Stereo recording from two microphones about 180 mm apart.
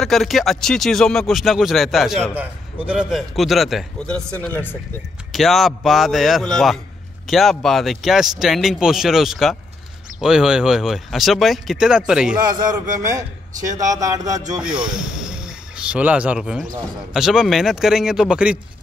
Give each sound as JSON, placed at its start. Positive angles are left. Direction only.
{"t": 0.0, "sound": "speech", "side_deg": 0}
{"t": 13.7, "sound": "speech", "side_deg": -20}
{"t": 14.6, "sound": "speech", "side_deg": -5}